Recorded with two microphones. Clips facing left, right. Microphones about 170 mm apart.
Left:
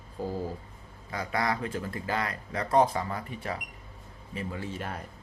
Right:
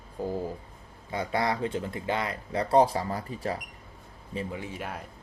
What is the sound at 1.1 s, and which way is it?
Speech, 25° right (ahead or behind).